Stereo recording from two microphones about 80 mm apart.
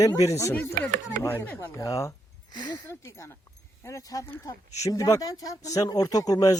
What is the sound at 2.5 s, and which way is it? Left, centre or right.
Speech, left.